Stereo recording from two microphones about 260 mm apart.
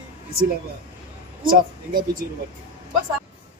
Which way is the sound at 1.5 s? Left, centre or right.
Right.